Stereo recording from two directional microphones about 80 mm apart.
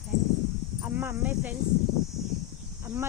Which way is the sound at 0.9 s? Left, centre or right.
Right.